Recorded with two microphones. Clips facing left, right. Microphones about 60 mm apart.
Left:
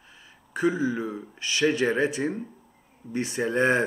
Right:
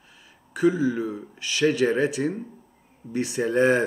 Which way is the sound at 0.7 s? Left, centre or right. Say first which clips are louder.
Right 2 dB; centre.